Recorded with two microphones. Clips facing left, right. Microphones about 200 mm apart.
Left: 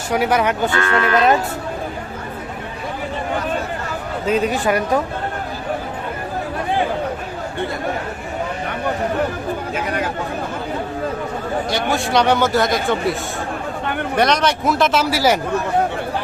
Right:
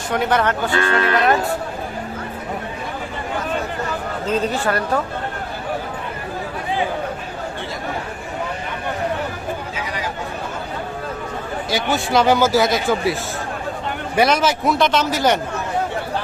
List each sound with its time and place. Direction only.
0.1 s speech: 10° left (ahead or behind)
0.7 s speech: 25° right (ahead or behind)
4.3 s speech: 10° left (ahead or behind)
9.7 s speech: 55° left (ahead or behind)
11.9 s speech: centre (ahead or behind)
14.2 s speech: 5° right (ahead or behind)